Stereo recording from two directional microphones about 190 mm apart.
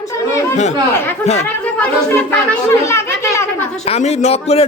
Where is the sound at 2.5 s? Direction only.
15° left (ahead or behind).